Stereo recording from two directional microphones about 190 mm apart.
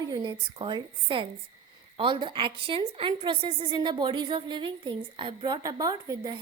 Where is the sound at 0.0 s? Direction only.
20° right (ahead or behind).